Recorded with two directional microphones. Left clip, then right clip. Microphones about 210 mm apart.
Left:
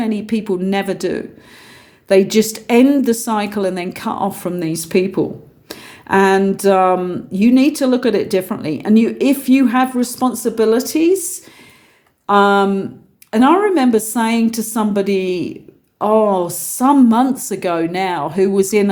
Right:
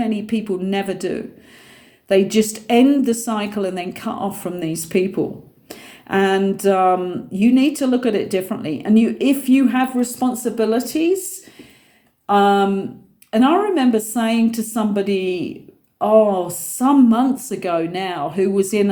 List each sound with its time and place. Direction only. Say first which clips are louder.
0.0 s speech: left 2 dB; 50° left (ahead or behind)
12.2 s a woman's voice: left 3 dB; 50° left (ahead or behind)